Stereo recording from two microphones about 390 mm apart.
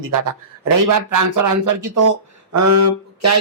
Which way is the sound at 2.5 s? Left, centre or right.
Right.